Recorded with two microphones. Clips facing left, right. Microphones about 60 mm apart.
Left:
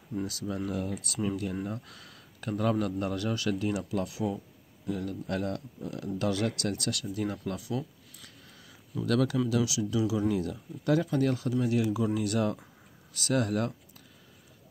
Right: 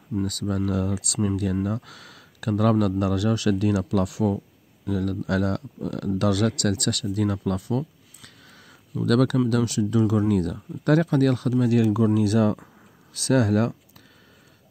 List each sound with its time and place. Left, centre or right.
0.2 s speech: right
0.7 s speech: right
9.0 s speech: right
9.5 s speech: right
11.6 s speech: right
13.3 s speech: right